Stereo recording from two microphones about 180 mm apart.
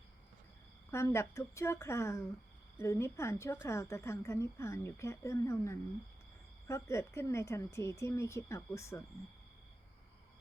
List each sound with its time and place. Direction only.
0.9 s speech: 15° left (ahead or behind)